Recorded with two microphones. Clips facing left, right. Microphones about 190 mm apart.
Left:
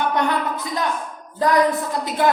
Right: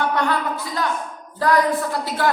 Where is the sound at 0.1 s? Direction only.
20° left (ahead or behind).